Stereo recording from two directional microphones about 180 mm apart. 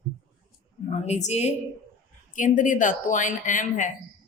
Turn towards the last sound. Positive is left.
turn(degrees=45)  # may be behind; listen again after turning